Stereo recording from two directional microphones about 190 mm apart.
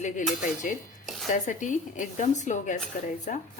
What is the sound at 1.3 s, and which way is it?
Speech, 40° left (ahead or behind).